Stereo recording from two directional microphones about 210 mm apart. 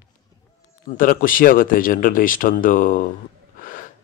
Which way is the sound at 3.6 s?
40° left (ahead or behind).